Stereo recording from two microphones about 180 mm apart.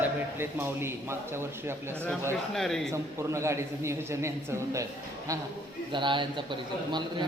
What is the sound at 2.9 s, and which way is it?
A man's voice, 15° right (ahead or behind).